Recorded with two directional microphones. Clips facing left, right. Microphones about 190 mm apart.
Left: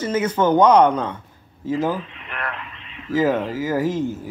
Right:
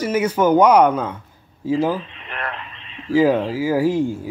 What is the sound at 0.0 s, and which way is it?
Speech, 10° right (ahead or behind).